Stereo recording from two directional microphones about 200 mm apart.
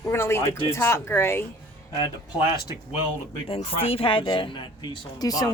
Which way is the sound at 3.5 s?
30° left (ahead or behind).